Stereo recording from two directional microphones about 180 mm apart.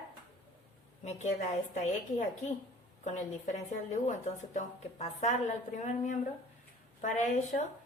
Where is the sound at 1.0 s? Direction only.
40° left (ahead or behind).